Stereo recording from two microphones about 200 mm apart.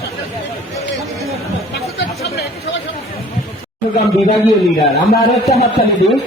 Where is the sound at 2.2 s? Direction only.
55° left (ahead or behind).